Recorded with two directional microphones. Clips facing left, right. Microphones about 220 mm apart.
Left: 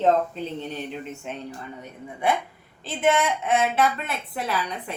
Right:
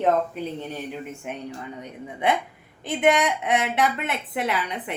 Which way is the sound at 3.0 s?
15° right (ahead or behind).